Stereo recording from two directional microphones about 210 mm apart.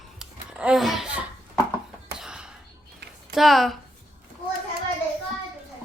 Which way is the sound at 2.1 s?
5° right (ahead or behind).